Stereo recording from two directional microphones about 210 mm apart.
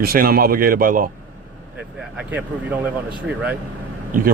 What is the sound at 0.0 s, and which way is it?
Speech, 45° right (ahead or behind).